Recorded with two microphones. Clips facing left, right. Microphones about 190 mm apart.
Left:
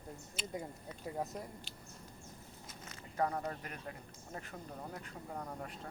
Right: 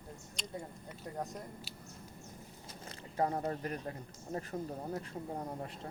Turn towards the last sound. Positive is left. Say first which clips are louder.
# right 4 dB
turn(degrees=-25)  # may be behind; listen again after turning